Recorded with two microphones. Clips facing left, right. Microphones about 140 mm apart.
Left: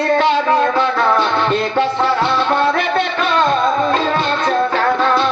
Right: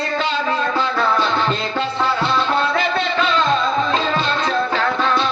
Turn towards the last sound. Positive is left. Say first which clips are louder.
# left 4 dB
turn(degrees=50)  # may be behind; listen again after turning